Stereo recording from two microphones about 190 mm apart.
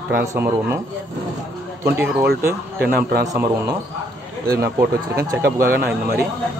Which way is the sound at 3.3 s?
20° right (ahead or behind).